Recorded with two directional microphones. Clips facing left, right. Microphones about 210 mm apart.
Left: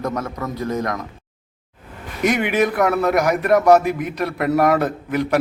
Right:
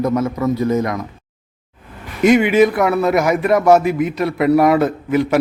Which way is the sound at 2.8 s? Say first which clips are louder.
Right 2 dB; 10° right (ahead or behind).